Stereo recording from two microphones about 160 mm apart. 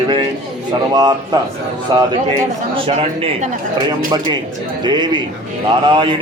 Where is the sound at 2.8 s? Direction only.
35° right (ahead or behind).